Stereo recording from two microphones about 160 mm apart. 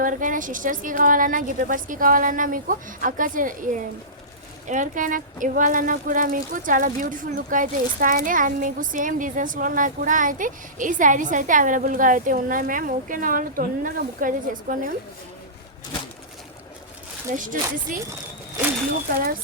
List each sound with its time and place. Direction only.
0.0 s speech: 55° right (ahead or behind)
17.3 s speech: 55° right (ahead or behind)